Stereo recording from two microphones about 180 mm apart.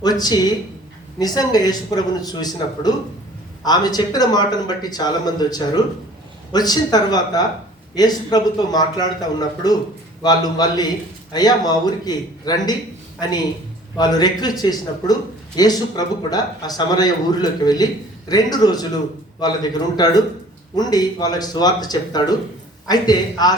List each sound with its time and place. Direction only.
0.0 s speech: 20° left (ahead or behind)
13.9 s speech: 20° left (ahead or behind)